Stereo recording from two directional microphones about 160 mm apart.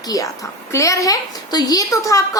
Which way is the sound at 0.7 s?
20° left (ahead or behind).